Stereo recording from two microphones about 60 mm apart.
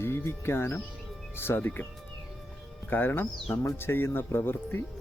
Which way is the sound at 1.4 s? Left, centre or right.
Left.